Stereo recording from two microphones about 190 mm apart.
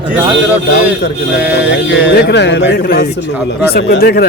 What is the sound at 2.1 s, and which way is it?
Speech, 65° left (ahead or behind).